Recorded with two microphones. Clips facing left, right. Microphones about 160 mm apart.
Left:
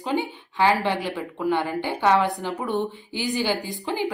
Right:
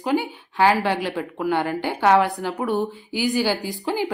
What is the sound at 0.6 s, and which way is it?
A woman's voice, 15° right (ahead or behind).